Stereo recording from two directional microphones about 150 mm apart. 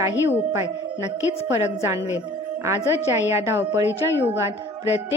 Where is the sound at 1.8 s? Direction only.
20° right (ahead or behind).